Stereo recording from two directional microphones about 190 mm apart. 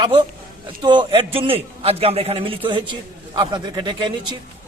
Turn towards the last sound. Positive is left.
turn(degrees=-25)  # may be behind; listen again after turning